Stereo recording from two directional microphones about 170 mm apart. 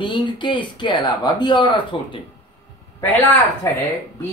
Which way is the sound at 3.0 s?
10° left (ahead or behind).